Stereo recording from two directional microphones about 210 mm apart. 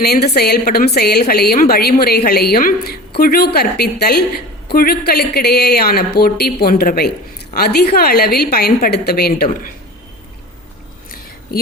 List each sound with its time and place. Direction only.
0.0 s a woman's voice: 50° left (ahead or behind)